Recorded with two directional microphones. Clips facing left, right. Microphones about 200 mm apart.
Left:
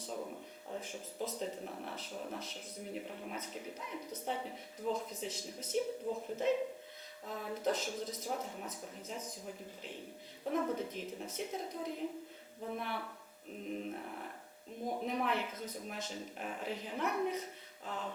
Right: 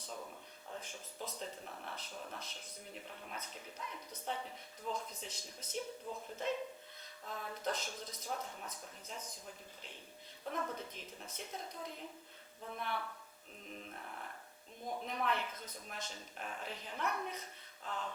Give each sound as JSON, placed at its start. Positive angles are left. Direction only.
{"t": 0.1, "sound": "a sound", "side_deg": 20}
{"t": 0.8, "sound": "speech", "side_deg": 5}
{"t": 8.4, "sound": "speech", "side_deg": 20}
{"t": 9.0, "sound": "speech", "side_deg": 5}
{"t": 13.7, "sound": "mantra", "side_deg": 10}
{"t": 15.0, "sound": "speech", "side_deg": 5}